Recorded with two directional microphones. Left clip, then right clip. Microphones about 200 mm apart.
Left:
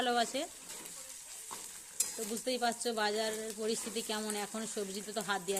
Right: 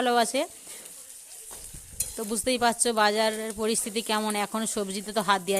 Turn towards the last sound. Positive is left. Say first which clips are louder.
# right 11 dB
turn(degrees=-35)  # may be behind; listen again after turning